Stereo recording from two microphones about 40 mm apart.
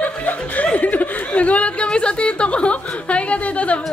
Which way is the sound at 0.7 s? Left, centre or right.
Left.